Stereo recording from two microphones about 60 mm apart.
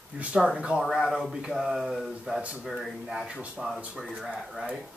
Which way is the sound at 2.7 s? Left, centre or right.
Centre.